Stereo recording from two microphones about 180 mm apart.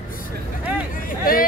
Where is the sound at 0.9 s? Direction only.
50° left (ahead or behind).